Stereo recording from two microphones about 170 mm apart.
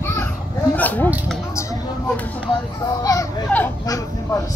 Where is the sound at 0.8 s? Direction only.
10° left (ahead or behind).